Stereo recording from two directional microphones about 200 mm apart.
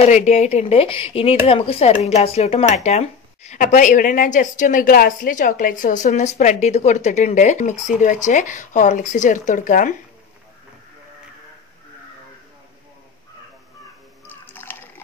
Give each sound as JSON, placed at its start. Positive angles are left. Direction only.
{"t": 0.1, "sound": "speech", "side_deg": 35}
{"t": 14.2, "sound": "water", "side_deg": 10}